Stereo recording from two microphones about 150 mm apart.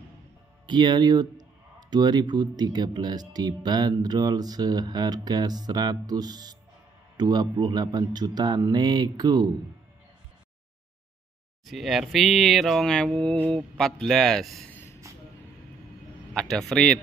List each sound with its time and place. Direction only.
0.7 s speech: 30° right (ahead or behind)
11.6 s speech: centre (ahead or behind)
15.0 s vehicle: 20° right (ahead or behind)
16.3 s speech: 5° left (ahead or behind)